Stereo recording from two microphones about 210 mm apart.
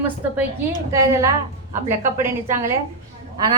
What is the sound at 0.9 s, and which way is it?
A woman's voice, 15° right (ahead or behind).